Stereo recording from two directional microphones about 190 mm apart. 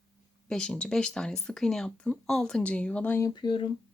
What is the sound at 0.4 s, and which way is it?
A woman's voice, 5° left (ahead or behind).